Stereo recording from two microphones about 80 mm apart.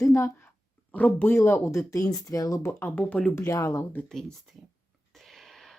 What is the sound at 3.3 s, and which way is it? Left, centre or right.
Speech, left.